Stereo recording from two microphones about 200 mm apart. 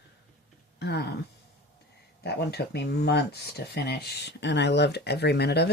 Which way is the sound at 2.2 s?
55° left (ahead or behind).